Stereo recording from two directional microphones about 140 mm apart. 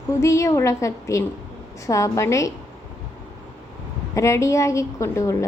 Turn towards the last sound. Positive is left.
turn(degrees=20)  # may be behind; listen again after turning